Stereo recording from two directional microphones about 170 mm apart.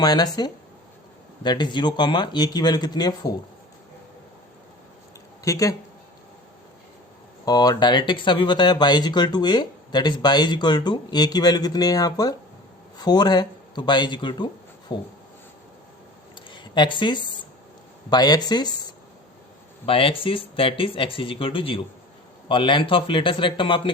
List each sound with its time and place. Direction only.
0.0 s speech: 25° left (ahead or behind)
5.5 s speech: 20° left (ahead or behind)
7.4 s speech: 20° left (ahead or behind)
16.5 s a sound: 25° left (ahead or behind)
18.1 s speech: 25° left (ahead or behind)